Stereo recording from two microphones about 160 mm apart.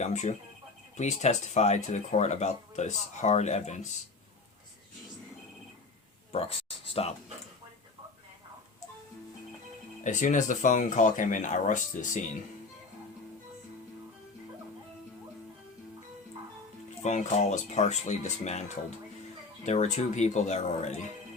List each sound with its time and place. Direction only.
0.0 s speech: 45° left (ahead or behind)
6.3 s speech: 35° left (ahead or behind)
10.0 s speech: 50° left (ahead or behind)
17.0 s speech: 50° left (ahead or behind)